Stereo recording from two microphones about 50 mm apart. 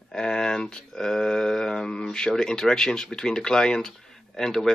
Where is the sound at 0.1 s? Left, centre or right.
Centre.